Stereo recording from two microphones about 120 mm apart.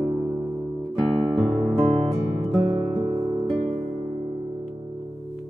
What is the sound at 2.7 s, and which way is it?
Music, 45° right (ahead or behind).